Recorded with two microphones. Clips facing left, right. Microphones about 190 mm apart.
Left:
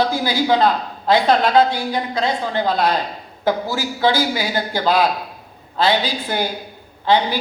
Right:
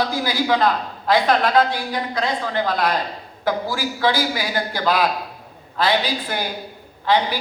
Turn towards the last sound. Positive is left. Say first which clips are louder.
# left 2 dB
turn(degrees=25)  # may be behind; listen again after turning